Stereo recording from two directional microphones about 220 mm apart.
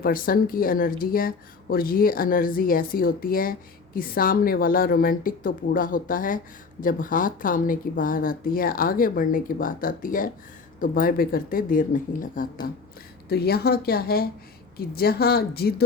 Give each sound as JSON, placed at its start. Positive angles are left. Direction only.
{"t": 0.0, "sound": "a woman's voice", "side_deg": 40}